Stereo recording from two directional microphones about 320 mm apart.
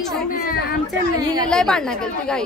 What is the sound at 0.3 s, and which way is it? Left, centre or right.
Speech, left.